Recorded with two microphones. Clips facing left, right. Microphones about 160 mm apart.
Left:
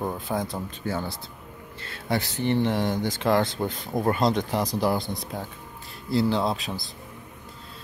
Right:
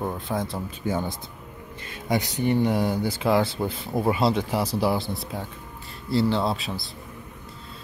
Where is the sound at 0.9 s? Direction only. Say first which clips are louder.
Right 3 dB; 15° right (ahead or behind); by 6.9 s centre (ahead or behind).